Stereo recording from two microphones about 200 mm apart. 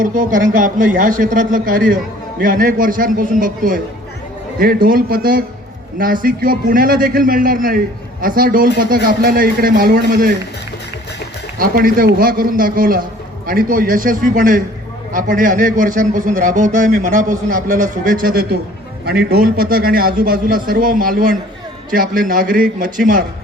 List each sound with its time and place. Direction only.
0.0 s a man's voice: 40° right (ahead or behind)
11.5 s a man's voice: 45° right (ahead or behind)